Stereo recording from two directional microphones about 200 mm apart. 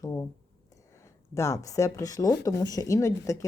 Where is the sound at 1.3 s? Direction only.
15° left (ahead or behind).